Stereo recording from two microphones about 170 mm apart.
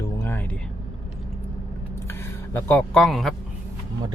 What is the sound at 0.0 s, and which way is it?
Vehicle, 15° left (ahead or behind).